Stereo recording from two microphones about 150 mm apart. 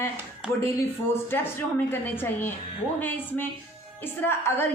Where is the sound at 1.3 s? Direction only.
15° left (ahead or behind).